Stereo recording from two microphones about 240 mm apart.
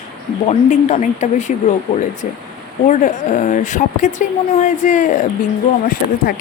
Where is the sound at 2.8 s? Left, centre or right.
Left.